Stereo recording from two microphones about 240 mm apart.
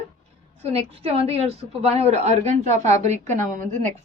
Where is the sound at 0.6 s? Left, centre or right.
Right.